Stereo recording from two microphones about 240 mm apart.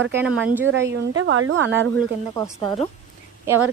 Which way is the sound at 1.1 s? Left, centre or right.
Right.